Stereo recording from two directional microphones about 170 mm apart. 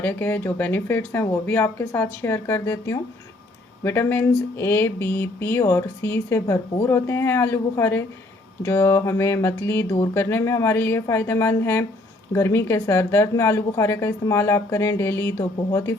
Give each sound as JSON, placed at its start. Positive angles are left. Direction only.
{"t": 0.0, "sound": "speech", "side_deg": 10}